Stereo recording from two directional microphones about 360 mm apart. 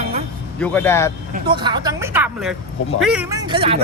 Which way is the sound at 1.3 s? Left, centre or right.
Centre.